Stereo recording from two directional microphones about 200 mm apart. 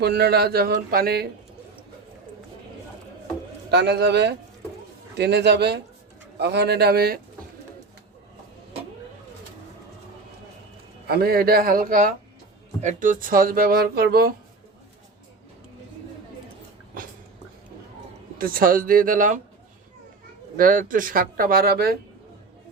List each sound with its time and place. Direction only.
0.0 s speech: 55° right (ahead or behind)
3.7 s speech: 55° right (ahead or behind)
11.0 s speech: 50° right (ahead or behind)
18.3 s speech: 45° right (ahead or behind)
20.6 s speech: 45° right (ahead or behind)